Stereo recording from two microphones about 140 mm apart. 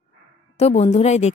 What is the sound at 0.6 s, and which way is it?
Speech, 50° left (ahead or behind).